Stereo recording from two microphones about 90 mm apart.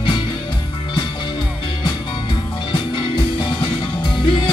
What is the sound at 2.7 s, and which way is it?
Music, 65° left (ahead or behind).